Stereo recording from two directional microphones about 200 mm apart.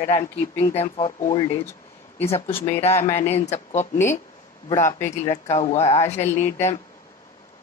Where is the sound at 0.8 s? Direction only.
30° left (ahead or behind); by 3.2 s 10° left (ahead or behind).